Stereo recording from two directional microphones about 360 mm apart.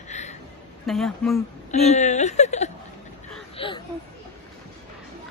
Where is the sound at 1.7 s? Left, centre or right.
Centre.